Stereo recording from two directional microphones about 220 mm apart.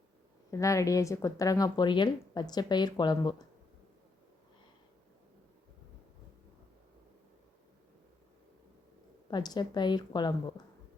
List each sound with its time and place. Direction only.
0.5 s speech: 15° left (ahead or behind)
9.3 s a woman's voice: 20° left (ahead or behind)